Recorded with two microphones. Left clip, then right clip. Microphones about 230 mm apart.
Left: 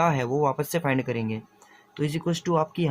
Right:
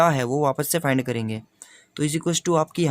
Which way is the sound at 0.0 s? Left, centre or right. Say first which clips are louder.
Right 3 dB; right.